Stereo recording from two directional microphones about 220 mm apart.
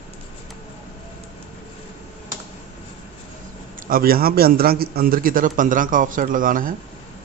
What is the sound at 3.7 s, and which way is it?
A man's voice, 40° right (ahead or behind).